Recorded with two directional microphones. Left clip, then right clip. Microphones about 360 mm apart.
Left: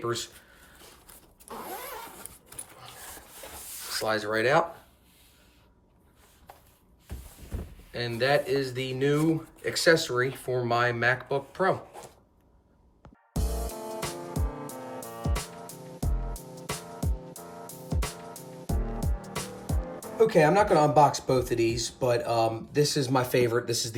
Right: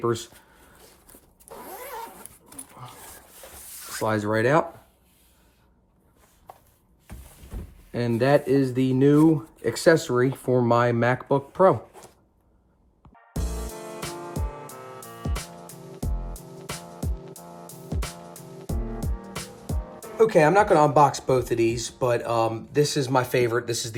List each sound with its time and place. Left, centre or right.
1.6 s vehicle: centre
3.1 s a sound: centre
4.0 s speech: centre
7.5 s a sound: centre
7.9 s speech: centre
13.3 s music: centre
18.6 s speech: centre